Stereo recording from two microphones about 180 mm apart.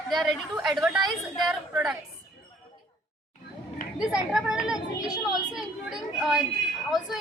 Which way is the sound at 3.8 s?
50° left (ahead or behind).